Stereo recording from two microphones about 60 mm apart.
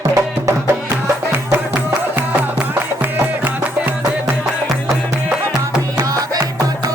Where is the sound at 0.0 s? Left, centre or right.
Right.